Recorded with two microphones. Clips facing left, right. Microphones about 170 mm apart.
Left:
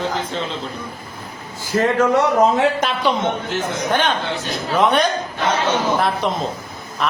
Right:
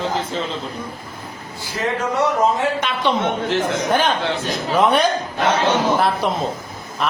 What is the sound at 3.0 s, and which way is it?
Speech, centre (ahead or behind).